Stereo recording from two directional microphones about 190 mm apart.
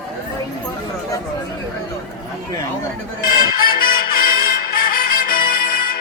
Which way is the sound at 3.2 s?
50° left (ahead or behind).